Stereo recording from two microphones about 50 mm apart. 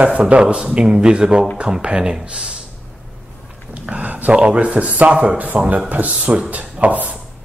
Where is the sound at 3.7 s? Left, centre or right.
Right.